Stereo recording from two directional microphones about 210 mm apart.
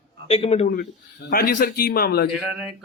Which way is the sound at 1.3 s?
45° left (ahead or behind).